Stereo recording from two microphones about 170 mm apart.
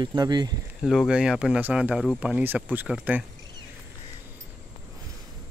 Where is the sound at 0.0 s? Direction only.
25° right (ahead or behind).